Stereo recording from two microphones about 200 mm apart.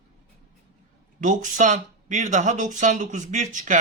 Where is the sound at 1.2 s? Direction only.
40° right (ahead or behind).